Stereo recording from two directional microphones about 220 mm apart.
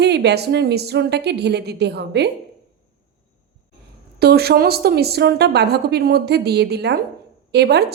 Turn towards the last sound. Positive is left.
turn(degrees=-50)  # may be behind; listen again after turning